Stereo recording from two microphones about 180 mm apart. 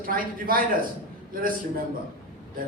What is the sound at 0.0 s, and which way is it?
A man's voice, 50° right (ahead or behind).